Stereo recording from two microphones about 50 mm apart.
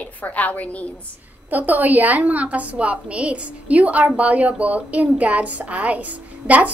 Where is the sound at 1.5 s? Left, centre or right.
Right.